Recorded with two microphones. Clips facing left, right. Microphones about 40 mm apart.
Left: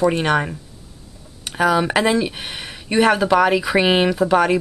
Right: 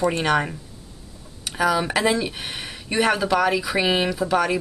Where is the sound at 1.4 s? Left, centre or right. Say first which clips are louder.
Left 4 dB; left.